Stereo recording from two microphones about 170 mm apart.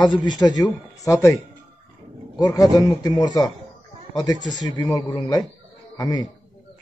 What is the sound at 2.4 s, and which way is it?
A man's voice, 20° left (ahead or behind).